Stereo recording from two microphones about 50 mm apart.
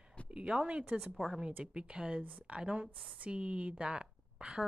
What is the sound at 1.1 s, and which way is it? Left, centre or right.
Speech, centre.